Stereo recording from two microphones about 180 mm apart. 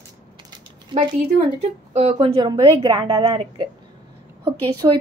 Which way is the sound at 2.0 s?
35° right (ahead or behind).